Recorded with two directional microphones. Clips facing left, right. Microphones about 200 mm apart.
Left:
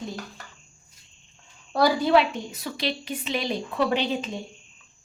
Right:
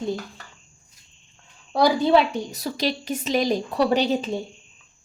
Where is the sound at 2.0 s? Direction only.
35° right (ahead or behind).